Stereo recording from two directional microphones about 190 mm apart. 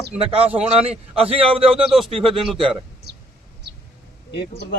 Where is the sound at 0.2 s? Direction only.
30° right (ahead or behind).